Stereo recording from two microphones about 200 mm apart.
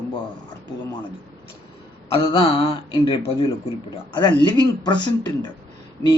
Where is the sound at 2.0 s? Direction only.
25° left (ahead or behind).